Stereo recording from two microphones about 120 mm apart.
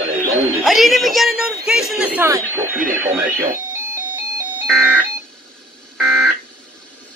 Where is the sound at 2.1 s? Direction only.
20° right (ahead or behind).